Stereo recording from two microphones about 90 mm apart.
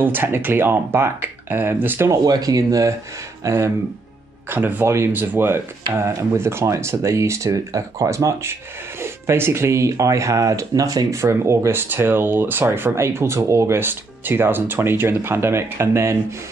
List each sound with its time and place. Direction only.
0.0 s speech: 25° right (ahead or behind)
2.2 s speech: 45° right (ahead or behind)
11.1 s speech: 30° right (ahead or behind)